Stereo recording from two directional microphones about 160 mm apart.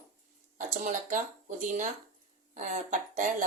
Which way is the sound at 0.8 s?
50° right (ahead or behind).